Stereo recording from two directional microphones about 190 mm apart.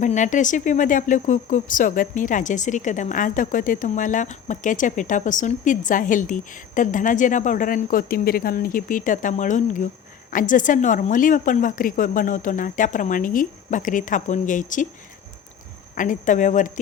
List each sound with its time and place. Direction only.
0.0 s speech: 40° left (ahead or behind)
16.0 s speech: 40° left (ahead or behind)